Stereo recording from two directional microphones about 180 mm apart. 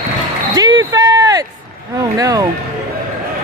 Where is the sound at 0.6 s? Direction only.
20° right (ahead or behind).